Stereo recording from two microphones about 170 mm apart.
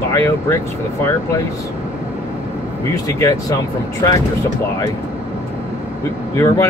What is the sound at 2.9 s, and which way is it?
Speech, 20° left (ahead or behind).